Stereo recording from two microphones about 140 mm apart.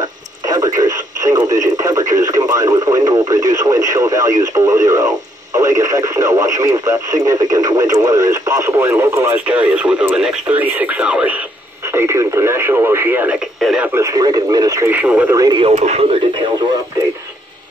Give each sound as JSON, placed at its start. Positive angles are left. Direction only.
{"t": 0.0, "sound": "radio", "side_deg": -25}
{"t": 4.6, "sound": "speech", "side_deg": -25}
{"t": 11.9, "sound": "speech", "side_deg": -20}
{"t": 13.6, "sound": "speech", "side_deg": 0}
{"t": 13.9, "sound": "speech", "side_deg": -25}
{"t": 14.9, "sound": "speech", "side_deg": -10}
{"t": 15.3, "sound": "speech", "side_deg": -25}
{"t": 15.7, "sound": "speech", "side_deg": -55}